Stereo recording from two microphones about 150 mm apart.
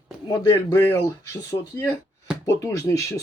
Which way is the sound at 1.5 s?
35° left (ahead or behind).